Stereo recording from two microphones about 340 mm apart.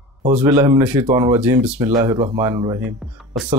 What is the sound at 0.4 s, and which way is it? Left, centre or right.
Speech, centre.